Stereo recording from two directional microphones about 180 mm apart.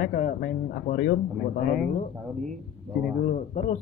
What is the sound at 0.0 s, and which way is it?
Speech, 55° left (ahead or behind).